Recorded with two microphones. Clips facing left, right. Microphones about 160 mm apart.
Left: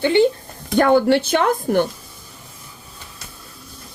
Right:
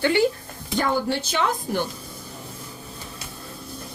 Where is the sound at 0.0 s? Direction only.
20° left (ahead or behind).